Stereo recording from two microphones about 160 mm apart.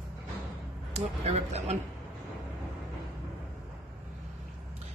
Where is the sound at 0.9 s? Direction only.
40° right (ahead or behind).